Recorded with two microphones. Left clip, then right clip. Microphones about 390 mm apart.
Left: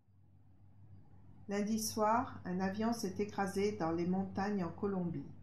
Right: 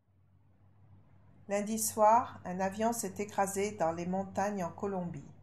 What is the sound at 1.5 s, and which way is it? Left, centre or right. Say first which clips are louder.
Speech: right 4 dB; right.